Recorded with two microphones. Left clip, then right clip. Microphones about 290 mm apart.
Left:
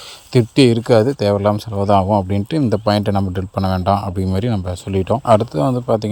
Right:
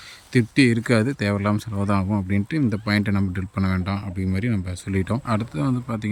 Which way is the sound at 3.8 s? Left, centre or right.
Left.